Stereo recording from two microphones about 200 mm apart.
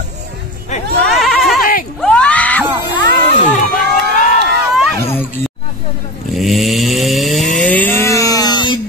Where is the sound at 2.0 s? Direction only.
5° left (ahead or behind).